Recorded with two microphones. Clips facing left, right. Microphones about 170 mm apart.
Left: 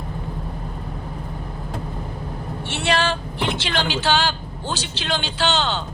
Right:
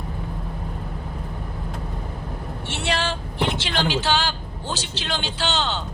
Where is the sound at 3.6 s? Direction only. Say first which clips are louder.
Even; 70° left (ahead or behind).